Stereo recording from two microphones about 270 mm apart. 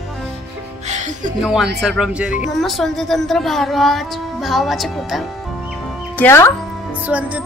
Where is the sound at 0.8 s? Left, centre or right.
Right.